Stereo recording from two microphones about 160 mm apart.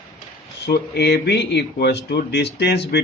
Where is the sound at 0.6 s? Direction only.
85° left.